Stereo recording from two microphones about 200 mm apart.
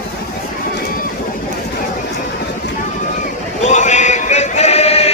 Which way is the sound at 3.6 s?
35° left (ahead or behind).